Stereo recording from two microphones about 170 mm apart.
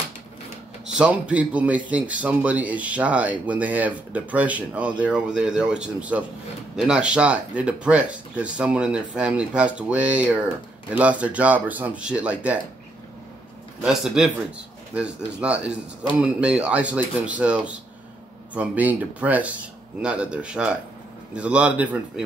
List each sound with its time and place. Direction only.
0.9 s speech: 5° right (ahead or behind)
13.8 s speech: 5° right (ahead or behind)